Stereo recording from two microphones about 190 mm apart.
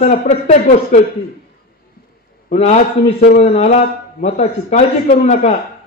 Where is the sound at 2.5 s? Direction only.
35° left (ahead or behind).